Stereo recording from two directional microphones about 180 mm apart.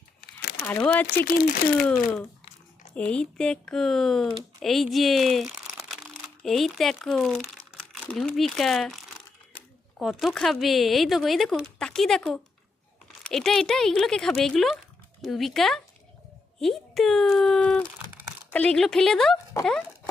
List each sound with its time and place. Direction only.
0.2 s crumpling: 55° left (ahead or behind)
0.6 s speech: 10° left (ahead or behind)
1.2 s speech: 55° left (ahead or behind)
2.9 s speech: 5° left (ahead or behind)
10.0 s speech: centre (ahead or behind)